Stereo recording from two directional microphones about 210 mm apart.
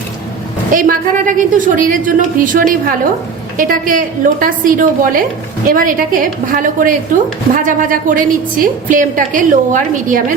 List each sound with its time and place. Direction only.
0.7 s a woman's voice: 40° right (ahead or behind)